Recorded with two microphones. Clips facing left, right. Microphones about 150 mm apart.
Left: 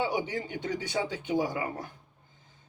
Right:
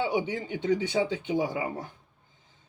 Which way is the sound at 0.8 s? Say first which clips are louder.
Right 5 dB; 25° right (ahead or behind).